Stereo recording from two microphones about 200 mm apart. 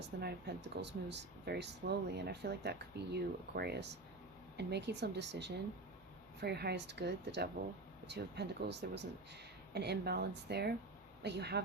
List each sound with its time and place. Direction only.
0.2 s speech: 55° right (ahead or behind)